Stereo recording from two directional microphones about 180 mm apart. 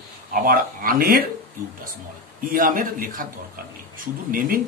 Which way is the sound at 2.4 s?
50° right (ahead or behind).